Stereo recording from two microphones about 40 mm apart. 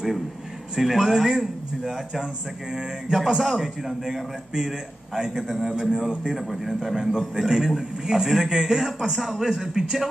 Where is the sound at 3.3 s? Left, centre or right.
Centre.